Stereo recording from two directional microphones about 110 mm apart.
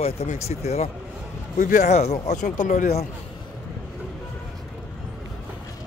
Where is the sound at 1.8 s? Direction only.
90° left.